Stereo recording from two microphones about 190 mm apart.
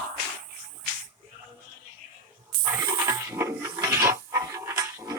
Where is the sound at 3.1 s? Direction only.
15° right (ahead or behind).